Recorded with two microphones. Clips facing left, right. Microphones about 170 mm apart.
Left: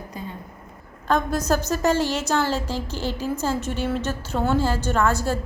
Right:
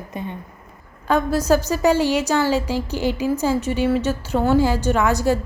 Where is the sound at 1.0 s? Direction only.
10° right (ahead or behind).